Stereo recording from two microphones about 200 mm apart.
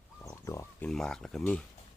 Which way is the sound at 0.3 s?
15° left (ahead or behind).